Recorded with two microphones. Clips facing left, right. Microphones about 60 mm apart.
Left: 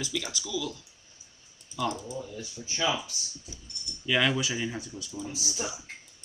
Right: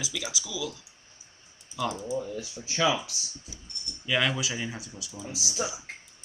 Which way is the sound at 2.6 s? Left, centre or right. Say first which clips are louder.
Right 3 dB; right.